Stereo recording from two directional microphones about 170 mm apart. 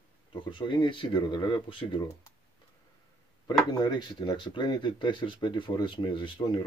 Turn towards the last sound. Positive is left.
turn(degrees=25)  # may be behind; listen again after turning